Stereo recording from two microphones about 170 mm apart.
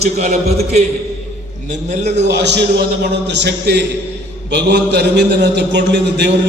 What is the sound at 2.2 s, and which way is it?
A man's voice, 85° right.